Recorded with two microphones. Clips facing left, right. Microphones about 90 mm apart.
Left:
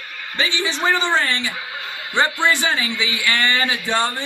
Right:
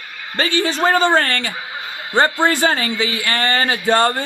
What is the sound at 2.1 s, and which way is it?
Speech, 40° right (ahead or behind).